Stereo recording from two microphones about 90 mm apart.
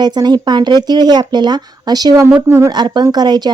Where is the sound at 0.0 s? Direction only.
55° right (ahead or behind).